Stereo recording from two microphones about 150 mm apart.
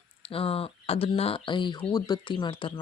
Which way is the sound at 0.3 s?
40° left (ahead or behind).